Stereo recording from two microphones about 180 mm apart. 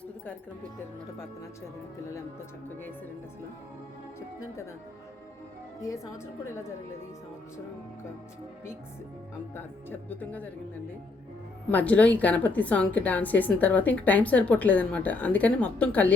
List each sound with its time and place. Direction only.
5.8 s a woman's voice: 20° left (ahead or behind)
9.6 s a woman's voice: 10° left (ahead or behind)
11.7 s a woman's voice: 10° left (ahead or behind)